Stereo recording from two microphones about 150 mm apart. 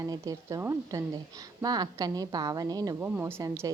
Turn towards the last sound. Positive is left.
turn(degrees=-20)  # may be behind; listen again after turning